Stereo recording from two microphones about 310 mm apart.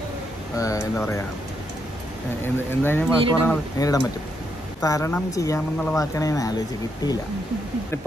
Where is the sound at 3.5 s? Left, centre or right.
Centre.